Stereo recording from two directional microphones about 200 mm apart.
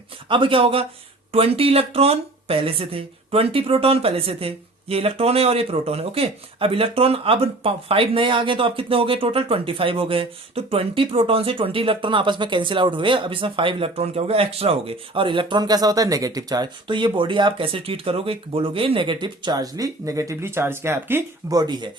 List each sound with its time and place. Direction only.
0.3 s speech: 25° right (ahead or behind)